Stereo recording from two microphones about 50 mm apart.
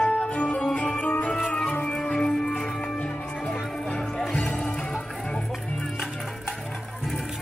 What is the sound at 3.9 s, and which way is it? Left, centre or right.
Music, centre.